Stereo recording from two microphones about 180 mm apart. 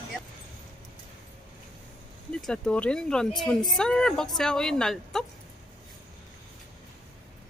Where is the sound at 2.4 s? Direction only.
5° left (ahead or behind).